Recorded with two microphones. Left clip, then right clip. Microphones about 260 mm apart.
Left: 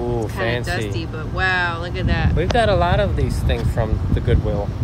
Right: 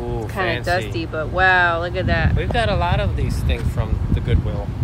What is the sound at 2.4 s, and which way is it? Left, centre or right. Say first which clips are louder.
Speech: left 4 dB; left.